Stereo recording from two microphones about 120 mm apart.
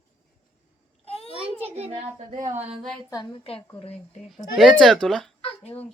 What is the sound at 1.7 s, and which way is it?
Speech, 60° right (ahead or behind).